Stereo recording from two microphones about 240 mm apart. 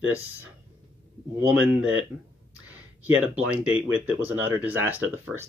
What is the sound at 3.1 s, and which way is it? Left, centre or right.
Speech, centre.